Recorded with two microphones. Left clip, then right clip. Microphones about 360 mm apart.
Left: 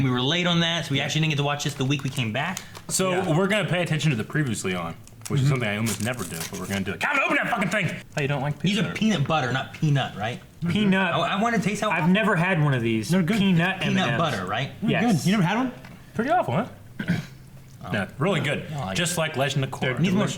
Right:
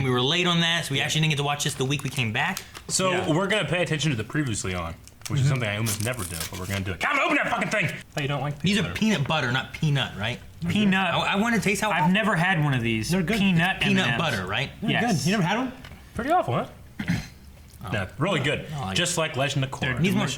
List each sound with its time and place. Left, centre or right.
0.0 s speech: left
2.9 s speech: right
8.7 s speech: left
10.7 s speech: centre
11.1 s speech: left
11.9 s speech: centre
13.7 s speech: left
15.3 s speech: right
16.1 s speech: right
17.9 s speech: right
20.0 s speech: left